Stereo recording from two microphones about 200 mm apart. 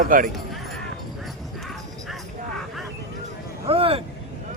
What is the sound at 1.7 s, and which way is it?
Music, centre (ahead or behind).